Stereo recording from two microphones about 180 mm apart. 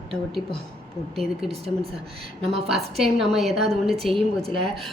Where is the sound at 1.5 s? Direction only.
35° right (ahead or behind).